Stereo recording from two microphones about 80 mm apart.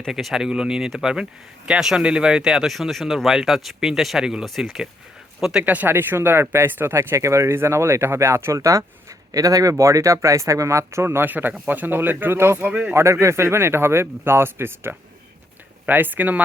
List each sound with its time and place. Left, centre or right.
0.1 s speech: centre
5.6 s speech: right
12.5 s speech: centre
12.9 s speech: right